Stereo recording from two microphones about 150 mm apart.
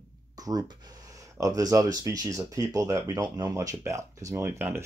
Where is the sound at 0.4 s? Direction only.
25° right (ahead or behind).